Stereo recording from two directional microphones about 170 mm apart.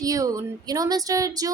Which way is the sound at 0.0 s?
20° right (ahead or behind).